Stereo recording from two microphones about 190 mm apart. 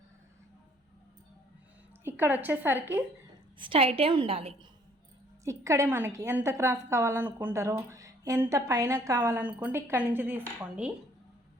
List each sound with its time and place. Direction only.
2.0 s a woman's voice: 10° right (ahead or behind)
3.6 s a woman's voice: 30° right (ahead or behind)
5.5 s a woman's voice: 15° right (ahead or behind)